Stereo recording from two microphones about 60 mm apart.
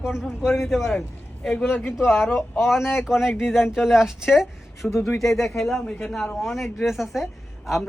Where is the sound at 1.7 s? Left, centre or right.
Left.